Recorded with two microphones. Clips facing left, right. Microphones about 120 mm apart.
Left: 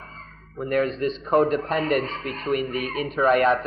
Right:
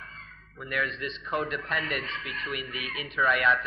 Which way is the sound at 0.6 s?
40° left (ahead or behind).